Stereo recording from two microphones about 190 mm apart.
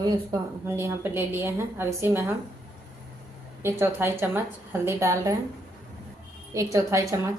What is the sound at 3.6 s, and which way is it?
A woman's voice, 10° right (ahead or behind).